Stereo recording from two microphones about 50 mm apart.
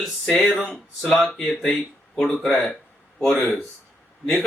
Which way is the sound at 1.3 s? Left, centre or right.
Centre.